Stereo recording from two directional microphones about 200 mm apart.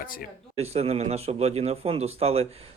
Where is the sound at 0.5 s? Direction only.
30° right (ahead or behind).